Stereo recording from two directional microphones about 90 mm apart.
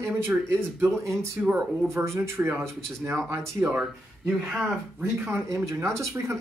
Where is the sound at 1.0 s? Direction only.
35° right (ahead or behind).